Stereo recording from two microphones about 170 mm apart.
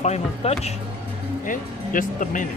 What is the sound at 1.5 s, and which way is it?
Speech, 50° left (ahead or behind).